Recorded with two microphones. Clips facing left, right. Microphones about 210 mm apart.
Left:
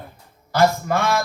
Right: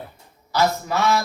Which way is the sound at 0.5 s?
50° left (ahead or behind).